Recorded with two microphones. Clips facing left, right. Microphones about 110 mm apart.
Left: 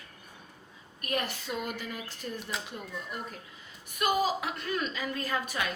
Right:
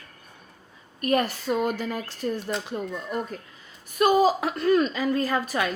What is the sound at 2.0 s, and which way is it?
Speech, 90° right.